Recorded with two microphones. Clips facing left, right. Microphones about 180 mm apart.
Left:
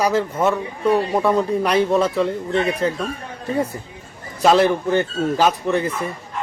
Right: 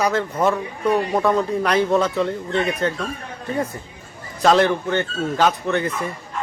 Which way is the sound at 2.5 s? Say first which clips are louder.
Left 1 dB; 30° left (ahead or behind).